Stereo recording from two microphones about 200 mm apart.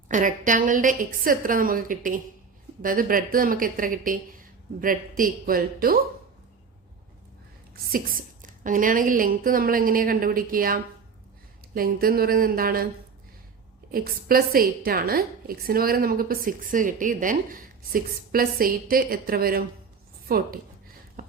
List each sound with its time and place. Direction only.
0.1 s a woman's voice: 40° right (ahead or behind)
7.9 s a woman's voice: 45° right (ahead or behind)
13.9 s a woman's voice: 45° right (ahead or behind)
21.2 s a sound: 45° right (ahead or behind)